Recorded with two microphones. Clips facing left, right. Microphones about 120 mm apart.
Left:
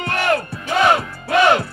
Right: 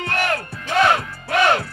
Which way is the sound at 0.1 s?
20° left (ahead or behind).